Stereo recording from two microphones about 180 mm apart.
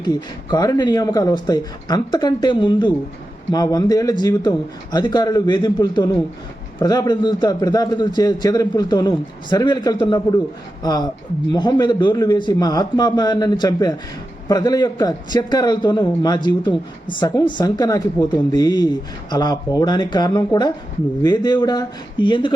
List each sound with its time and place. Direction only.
0.0 s a man's voice: 20° left (ahead or behind)
11.5 s a man's voice: 25° left (ahead or behind)